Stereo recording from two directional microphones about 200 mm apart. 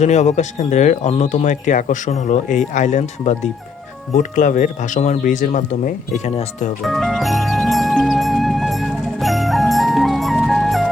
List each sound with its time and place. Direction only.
0.0 s speech: 35° left (ahead or behind)
6.8 s music: centre (ahead or behind)